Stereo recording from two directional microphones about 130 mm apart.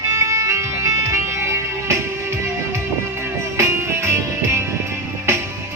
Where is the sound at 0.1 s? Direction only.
25° right (ahead or behind).